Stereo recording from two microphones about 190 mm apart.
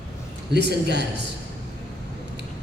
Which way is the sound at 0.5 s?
60° right (ahead or behind).